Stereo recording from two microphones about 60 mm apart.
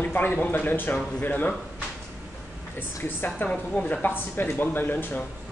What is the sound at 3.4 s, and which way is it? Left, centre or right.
Speech, centre.